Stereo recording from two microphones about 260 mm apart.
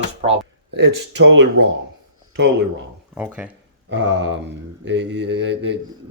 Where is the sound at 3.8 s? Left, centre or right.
Right.